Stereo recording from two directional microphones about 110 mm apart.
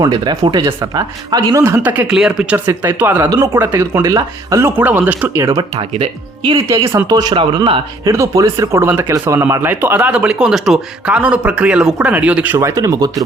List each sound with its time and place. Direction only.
0.0 s speech: 40° right (ahead or behind)
1.6 s speech: 20° right (ahead or behind)
2.6 s speech: 20° right (ahead or behind)
4.6 s speech: 15° right (ahead or behind)
5.5 s speech: 30° right (ahead or behind)
6.0 s speech: 50° right (ahead or behind)
6.7 s speech: 25° right (ahead or behind); by 8.1 s 45° right (ahead or behind)
8.1 s speech: 30° right (ahead or behind)
12.5 s speech: 30° right (ahead or behind)